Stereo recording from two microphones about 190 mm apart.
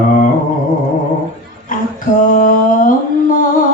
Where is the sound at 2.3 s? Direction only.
45° left (ahead or behind).